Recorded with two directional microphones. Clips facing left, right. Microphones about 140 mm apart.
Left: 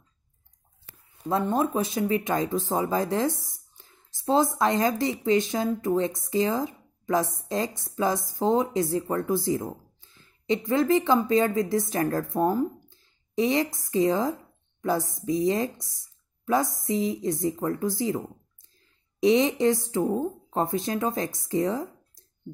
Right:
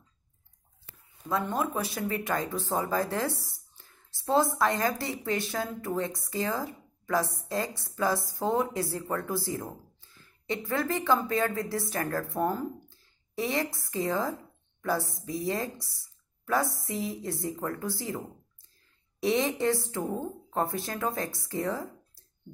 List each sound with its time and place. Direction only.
1.2 s speech: 25° left (ahead or behind)